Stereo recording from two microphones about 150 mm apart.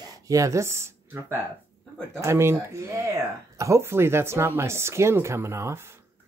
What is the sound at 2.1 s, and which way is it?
A woman's voice, 20° right (ahead or behind).